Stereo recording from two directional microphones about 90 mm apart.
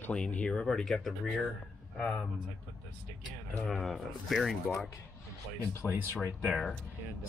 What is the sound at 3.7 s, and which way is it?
Speech, centre (ahead or behind).